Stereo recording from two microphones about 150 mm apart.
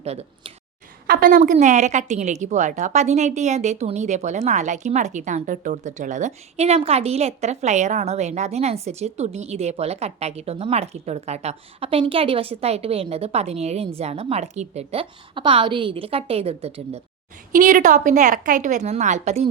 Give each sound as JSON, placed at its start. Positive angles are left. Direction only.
{"t": 0.0, "sound": "a woman's voice", "side_deg": -45}
{"t": 1.0, "sound": "a woman's voice", "side_deg": -70}
{"t": 17.5, "sound": "a woman's voice", "side_deg": -60}